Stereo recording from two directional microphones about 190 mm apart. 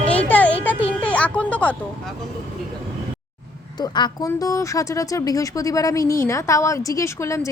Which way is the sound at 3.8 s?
20° left (ahead or behind).